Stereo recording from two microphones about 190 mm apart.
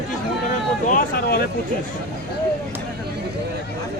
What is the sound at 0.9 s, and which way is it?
Speech, 50° left (ahead or behind).